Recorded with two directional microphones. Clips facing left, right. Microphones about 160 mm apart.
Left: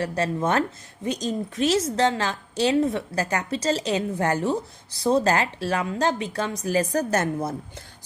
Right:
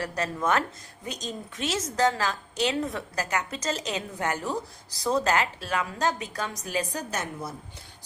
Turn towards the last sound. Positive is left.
turn(degrees=50)  # may be behind; listen again after turning